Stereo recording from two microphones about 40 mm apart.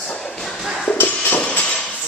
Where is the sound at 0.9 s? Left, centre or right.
Left.